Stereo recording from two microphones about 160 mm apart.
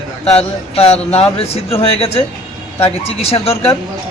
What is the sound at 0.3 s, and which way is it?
Speech, 40° left (ahead or behind).